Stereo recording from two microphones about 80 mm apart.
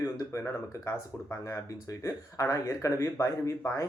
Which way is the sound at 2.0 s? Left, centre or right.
Left.